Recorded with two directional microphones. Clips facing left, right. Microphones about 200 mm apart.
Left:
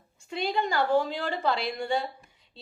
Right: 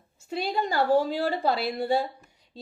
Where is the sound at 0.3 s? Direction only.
40° right (ahead or behind).